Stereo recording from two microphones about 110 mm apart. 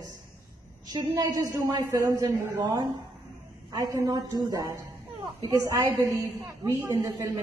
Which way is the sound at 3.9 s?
30° right (ahead or behind).